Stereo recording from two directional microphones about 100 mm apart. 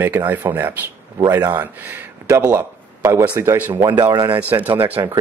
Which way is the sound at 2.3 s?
30° right (ahead or behind).